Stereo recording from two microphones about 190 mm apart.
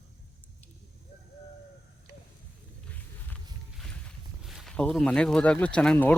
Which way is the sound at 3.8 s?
Centre (ahead or behind).